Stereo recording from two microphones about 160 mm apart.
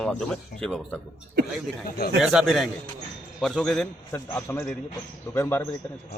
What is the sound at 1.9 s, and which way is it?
Speech, 75° left (ahead or behind).